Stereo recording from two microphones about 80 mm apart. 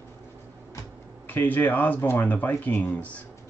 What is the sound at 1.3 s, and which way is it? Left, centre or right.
Speech, left.